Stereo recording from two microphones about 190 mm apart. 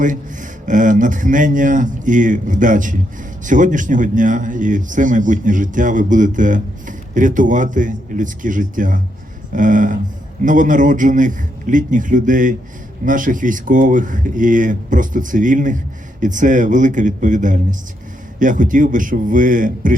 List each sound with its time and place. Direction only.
0.6 s a man's voice: 45° right (ahead or behind)